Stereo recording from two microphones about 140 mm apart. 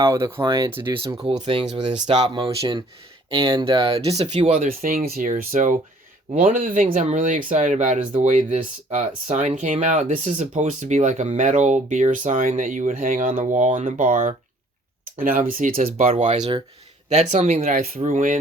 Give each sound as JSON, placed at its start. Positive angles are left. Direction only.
{"t": 0.0, "sound": "speech", "side_deg": -20}
{"t": 1.3, "sound": "speech", "side_deg": -45}
{"t": 2.3, "sound": "speech", "side_deg": -35}
{"t": 4.7, "sound": "speech", "side_deg": -90}
{"t": 15.2, "sound": "speech", "side_deg": -80}
{"t": 15.7, "sound": "speech", "side_deg": -45}